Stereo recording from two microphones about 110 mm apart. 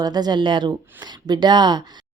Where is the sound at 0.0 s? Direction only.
40° right (ahead or behind).